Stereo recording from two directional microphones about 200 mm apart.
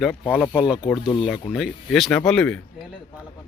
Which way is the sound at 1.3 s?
Centre (ahead or behind).